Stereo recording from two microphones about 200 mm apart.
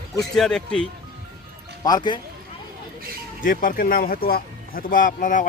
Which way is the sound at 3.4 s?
45° left (ahead or behind).